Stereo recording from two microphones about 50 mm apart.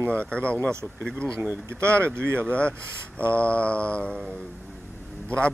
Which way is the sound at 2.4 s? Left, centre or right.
Left.